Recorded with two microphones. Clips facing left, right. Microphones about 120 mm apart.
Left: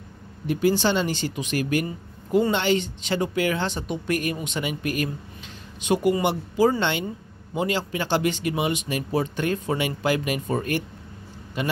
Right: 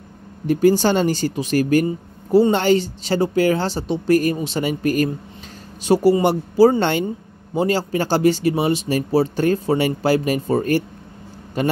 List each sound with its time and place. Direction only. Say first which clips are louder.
0.5 s speech: right 6 dB; 40° right (ahead or behind)